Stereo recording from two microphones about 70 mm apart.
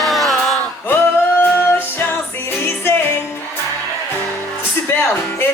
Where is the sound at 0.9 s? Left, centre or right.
Left.